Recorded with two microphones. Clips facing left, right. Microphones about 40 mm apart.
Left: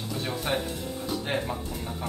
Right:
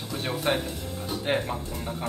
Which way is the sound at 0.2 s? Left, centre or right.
Right.